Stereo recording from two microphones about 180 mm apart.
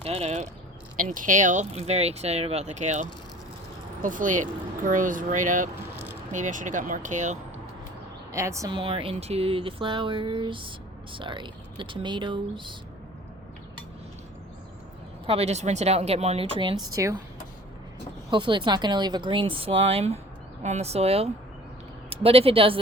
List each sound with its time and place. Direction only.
0.0 s speech: 35° right (ahead or behind)
0.9 s speech: 50° right (ahead or behind)
8.3 s speech: 15° right (ahead or behind)
8.7 s speech: 30° right (ahead or behind)
15.3 s speech: 35° right (ahead or behind); by 17.2 s 20° right (ahead or behind)
18.3 s speech: 25° right (ahead or behind)